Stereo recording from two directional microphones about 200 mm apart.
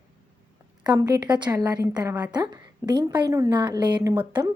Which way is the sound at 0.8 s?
20° right (ahead or behind).